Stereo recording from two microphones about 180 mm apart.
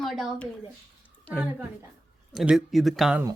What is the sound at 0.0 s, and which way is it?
Speech, centre (ahead or behind).